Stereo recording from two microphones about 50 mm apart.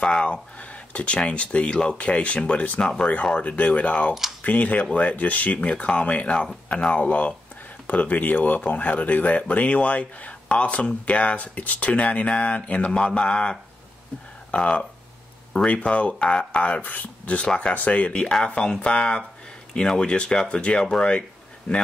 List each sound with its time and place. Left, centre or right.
0.0 s speech: centre
16.9 s speech: left
17.4 s speech: left
18.2 s speech: centre